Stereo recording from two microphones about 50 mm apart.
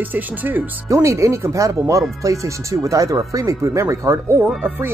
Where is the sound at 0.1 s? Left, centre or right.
Right.